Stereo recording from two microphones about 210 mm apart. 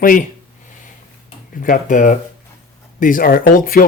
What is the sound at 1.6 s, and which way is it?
Speech, 40° left (ahead or behind).